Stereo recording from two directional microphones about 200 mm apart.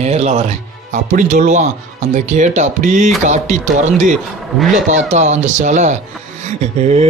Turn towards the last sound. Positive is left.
turn(degrees=-35)  # may be behind; listen again after turning